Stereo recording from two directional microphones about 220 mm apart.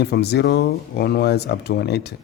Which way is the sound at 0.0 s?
50° left (ahead or behind).